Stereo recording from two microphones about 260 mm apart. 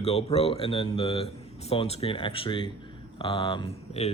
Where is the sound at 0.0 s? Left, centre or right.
Left.